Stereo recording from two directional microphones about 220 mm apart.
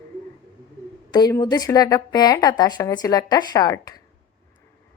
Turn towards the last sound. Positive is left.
turn(degrees=15)  # may be behind; listen again after turning